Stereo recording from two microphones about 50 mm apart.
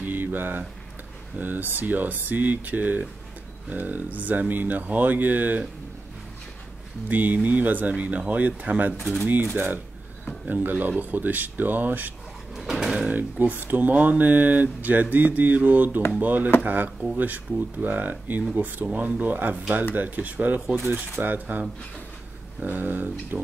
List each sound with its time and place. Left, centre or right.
0.0 s a sound: right
1.4 s speech: right
7.1 s speech: right
8.9 s speech: centre
10.5 s speech: right
12.5 s speech: centre
13.1 s speech: right